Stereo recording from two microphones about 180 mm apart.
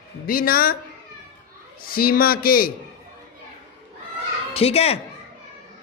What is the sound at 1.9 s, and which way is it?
Speech, 55° left (ahead or behind).